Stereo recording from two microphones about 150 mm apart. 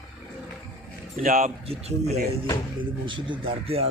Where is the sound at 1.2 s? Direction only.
65° right (ahead or behind).